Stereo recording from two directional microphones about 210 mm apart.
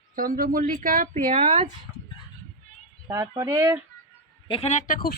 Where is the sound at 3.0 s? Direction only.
15° right (ahead or behind).